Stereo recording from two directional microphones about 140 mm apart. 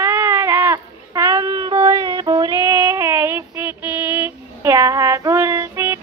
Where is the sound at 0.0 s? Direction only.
20° right (ahead or behind).